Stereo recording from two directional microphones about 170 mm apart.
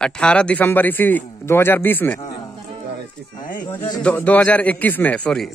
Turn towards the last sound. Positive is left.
turn(degrees=5)  # may be behind; listen again after turning